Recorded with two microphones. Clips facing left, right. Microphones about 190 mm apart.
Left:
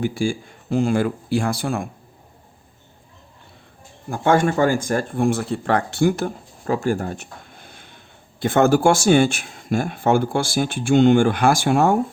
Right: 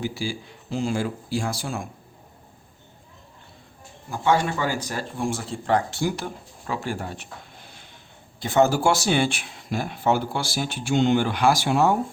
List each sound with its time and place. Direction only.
0.0 s speech: 50° left (ahead or behind)
4.1 s speech: 50° left (ahead or behind)